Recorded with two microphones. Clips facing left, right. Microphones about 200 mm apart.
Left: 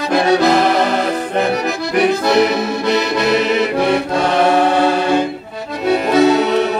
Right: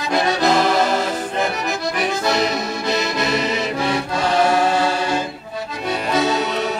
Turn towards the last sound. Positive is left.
turn(degrees=60)  # may be behind; listen again after turning